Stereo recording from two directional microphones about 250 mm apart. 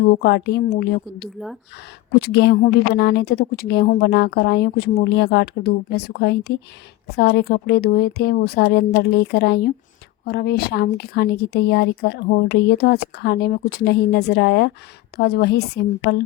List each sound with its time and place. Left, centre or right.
0.0 s speech: left